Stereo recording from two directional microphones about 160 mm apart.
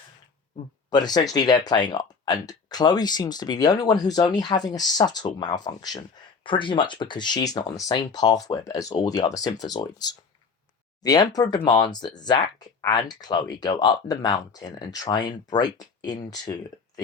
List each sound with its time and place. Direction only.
0.9 s speech: 25° left (ahead or behind)